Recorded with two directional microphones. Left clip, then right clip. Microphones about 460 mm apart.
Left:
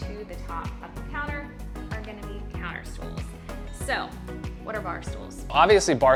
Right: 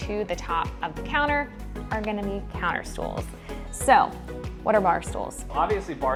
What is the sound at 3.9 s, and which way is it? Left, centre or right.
Speech, right.